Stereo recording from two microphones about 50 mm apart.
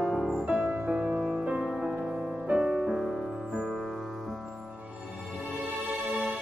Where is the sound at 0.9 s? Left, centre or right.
Right; by 3.0 s centre.